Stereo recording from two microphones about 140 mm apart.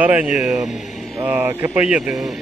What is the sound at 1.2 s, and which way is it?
Speech, 15° right (ahead or behind).